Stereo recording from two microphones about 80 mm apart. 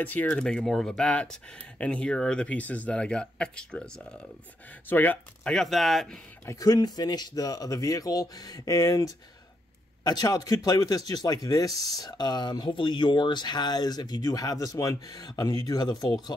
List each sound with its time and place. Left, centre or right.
0.0 s speech: left
4.8 s speech: left
5.4 s speech: centre
6.4 s speech: left